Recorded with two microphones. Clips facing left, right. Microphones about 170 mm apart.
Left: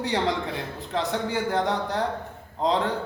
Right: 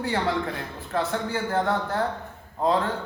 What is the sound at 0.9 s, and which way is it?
Speech, 15° left (ahead or behind).